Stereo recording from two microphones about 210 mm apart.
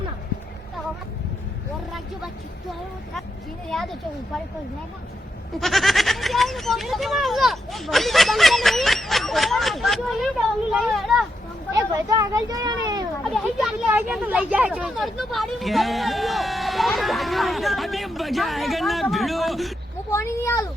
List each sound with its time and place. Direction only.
3.7 s speech: centre (ahead or behind)
5.5 s speech: centre (ahead or behind)
11.7 s speech: 15° right (ahead or behind)
13.9 s speech: 5° right (ahead or behind)
20.1 s speech: 15° left (ahead or behind)